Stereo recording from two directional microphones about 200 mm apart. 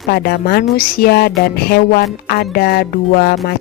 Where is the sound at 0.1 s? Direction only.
50° left (ahead or behind).